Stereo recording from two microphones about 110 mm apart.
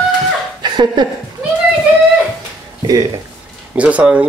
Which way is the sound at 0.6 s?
40° right (ahead or behind).